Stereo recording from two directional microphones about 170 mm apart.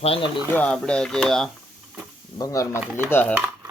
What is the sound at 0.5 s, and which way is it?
Speech, 5° left (ahead or behind).